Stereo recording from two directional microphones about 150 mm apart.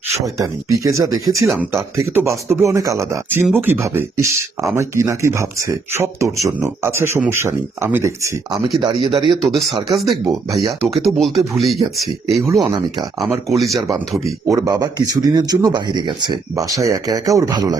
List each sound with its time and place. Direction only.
0.3 s speech: 20° right (ahead or behind)
8.8 s speech: 30° right (ahead or behind)
9.4 s speech: centre (ahead or behind)
14.4 s speech: 20° right (ahead or behind)